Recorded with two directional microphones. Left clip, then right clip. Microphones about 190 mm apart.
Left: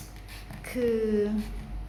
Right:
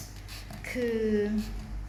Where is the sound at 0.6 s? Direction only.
20° left (ahead or behind).